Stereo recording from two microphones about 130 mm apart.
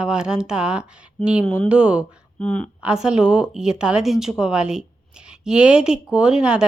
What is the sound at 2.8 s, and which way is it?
Speech, 5° right (ahead or behind).